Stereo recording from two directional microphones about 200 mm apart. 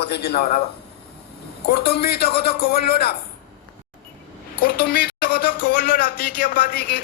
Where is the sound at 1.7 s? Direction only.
55° left (ahead or behind).